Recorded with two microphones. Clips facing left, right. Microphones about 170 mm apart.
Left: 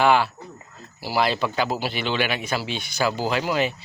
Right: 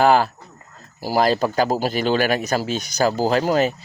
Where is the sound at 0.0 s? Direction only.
40° right (ahead or behind).